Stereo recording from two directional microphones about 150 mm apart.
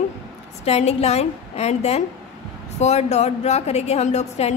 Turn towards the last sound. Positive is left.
turn(degrees=45)  # may be behind; listen again after turning